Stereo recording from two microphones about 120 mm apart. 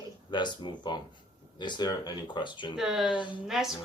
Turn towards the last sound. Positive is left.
turn(degrees=-5)  # may be behind; listen again after turning